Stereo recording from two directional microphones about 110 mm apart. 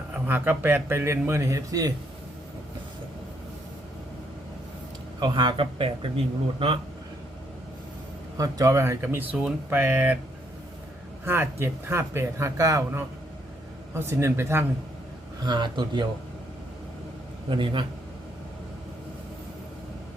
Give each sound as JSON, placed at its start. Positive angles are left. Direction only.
{"t": 0.1, "sound": "a man's voice", "side_deg": -15}
{"t": 5.2, "sound": "a man's voice", "side_deg": -45}
{"t": 8.4, "sound": "a man's voice", "side_deg": -30}
{"t": 11.3, "sound": "a man's voice", "side_deg": -20}
{"t": 15.4, "sound": "a man's voice", "side_deg": -45}
{"t": 17.5, "sound": "a man's voice", "side_deg": -45}